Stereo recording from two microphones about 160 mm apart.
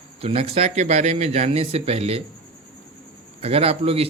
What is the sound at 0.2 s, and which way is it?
A man's voice, 40° right (ahead or behind).